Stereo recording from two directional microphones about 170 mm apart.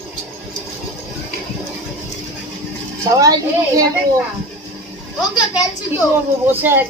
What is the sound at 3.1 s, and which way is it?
Speech, 20° right (ahead or behind).